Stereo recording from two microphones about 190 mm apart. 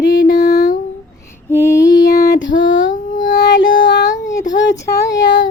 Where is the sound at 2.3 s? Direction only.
75° left (ahead or behind).